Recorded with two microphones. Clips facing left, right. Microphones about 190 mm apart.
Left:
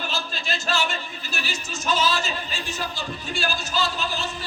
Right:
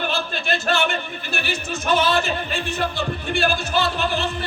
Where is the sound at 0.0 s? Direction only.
60° right (ahead or behind).